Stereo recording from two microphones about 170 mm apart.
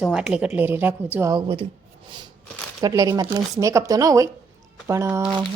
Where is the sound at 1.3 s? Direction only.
30° right (ahead or behind).